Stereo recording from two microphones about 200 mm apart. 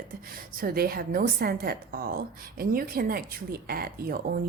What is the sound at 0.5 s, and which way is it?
A woman's voice, 45° right (ahead or behind).